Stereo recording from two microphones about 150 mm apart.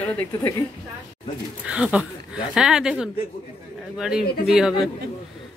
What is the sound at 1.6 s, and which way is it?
Speech, 10° right (ahead or behind).